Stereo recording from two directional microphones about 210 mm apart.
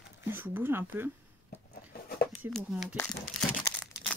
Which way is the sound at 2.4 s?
5° right (ahead or behind).